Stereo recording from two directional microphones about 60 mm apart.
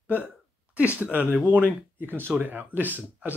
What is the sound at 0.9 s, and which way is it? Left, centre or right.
Speech, right.